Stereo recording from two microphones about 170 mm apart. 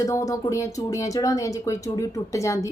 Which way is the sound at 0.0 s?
20° left (ahead or behind).